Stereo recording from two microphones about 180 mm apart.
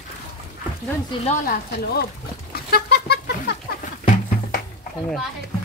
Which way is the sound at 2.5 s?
60° left (ahead or behind).